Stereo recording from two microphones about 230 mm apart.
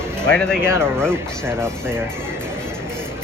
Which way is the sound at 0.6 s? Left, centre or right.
Centre.